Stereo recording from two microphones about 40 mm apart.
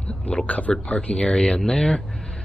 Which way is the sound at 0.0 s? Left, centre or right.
Left.